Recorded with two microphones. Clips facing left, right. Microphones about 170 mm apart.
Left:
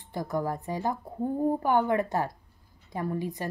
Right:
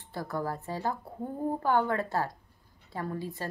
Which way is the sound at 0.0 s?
15° left (ahead or behind).